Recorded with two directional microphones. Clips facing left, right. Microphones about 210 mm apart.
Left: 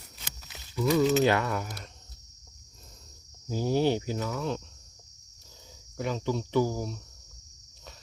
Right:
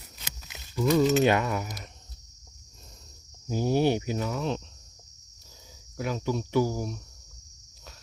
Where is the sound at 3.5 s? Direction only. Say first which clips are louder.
Right 1 dB; 15° right (ahead or behind).